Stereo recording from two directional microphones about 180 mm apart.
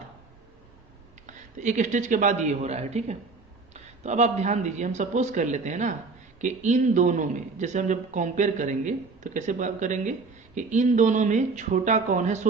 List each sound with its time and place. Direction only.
1.3 s a man's voice: 45° right (ahead or behind)